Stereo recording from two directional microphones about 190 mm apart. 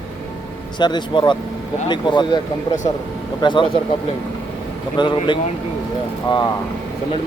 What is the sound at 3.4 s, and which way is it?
Speech, 25° left (ahead or behind).